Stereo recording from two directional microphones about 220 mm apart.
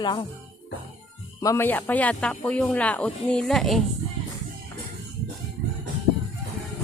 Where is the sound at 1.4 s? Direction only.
10° left (ahead or behind).